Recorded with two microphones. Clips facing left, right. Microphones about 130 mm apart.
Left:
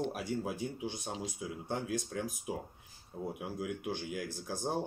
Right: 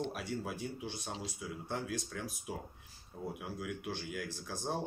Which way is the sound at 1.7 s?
50° left (ahead or behind).